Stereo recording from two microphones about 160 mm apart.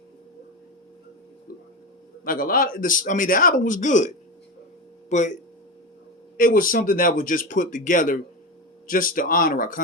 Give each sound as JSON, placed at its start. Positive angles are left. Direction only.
{"t": 2.2, "sound": "speech", "side_deg": 65}